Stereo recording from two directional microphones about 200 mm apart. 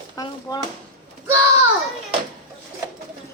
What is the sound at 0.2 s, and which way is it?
Speech, 20° left (ahead or behind).